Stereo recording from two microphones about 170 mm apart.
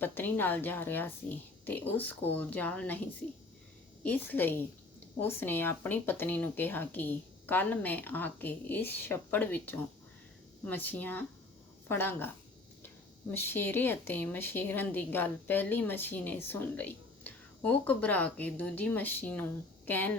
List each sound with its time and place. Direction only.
0.0 s speech: 10° left (ahead or behind)
4.0 s speech: 10° left (ahead or behind)
13.3 s speech: 15° left (ahead or behind)